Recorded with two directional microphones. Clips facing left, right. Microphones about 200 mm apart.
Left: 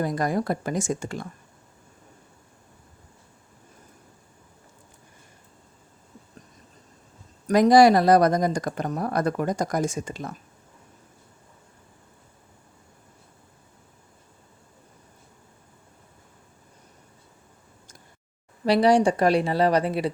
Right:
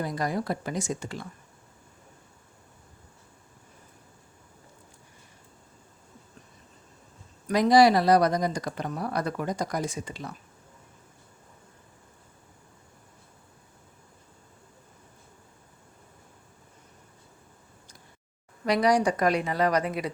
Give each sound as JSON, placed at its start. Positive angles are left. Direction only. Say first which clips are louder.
{"t": 0.0, "sound": "speech", "louder": "left 4 dB", "side_deg": 50}
{"t": 7.4, "sound": "speech", "louder": "left 4 dB", "side_deg": 45}
{"t": 18.6, "sound": "a woman's voice", "louder": "left 4 dB", "side_deg": 30}